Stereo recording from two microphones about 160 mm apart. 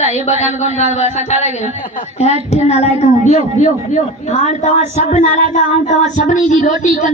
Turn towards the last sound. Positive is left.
turn(degrees=50)  # may be behind; listen again after turning